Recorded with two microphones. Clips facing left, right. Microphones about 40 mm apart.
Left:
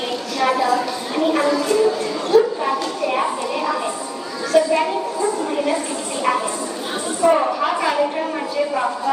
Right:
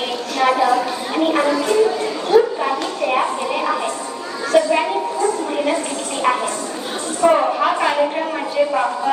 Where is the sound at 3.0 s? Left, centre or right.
Right.